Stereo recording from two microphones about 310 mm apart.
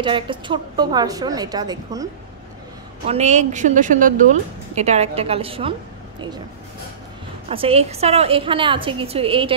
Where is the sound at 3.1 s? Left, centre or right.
Right.